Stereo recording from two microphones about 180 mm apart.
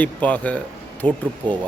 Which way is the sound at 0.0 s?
10° left (ahead or behind).